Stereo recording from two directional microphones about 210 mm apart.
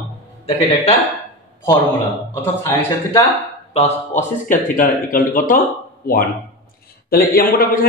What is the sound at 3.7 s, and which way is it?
A man's voice, 35° left (ahead or behind).